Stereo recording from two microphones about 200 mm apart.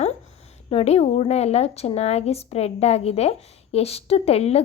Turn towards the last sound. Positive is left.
turn(degrees=30)  # may be behind; listen again after turning